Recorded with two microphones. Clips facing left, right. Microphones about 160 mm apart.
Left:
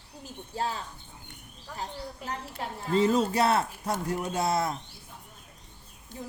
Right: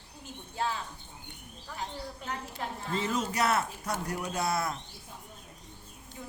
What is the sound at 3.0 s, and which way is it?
Speech, 35° left (ahead or behind).